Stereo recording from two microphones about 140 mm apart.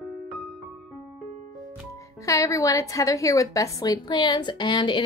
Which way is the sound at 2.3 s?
25° left (ahead or behind).